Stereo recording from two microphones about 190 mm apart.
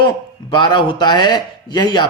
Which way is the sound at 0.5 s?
25° left (ahead or behind).